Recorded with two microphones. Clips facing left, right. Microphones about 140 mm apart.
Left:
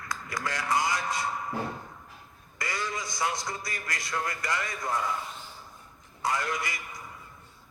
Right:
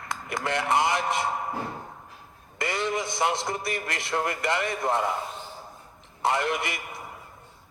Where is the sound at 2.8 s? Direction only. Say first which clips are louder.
Right 7 dB; 60° right (ahead or behind).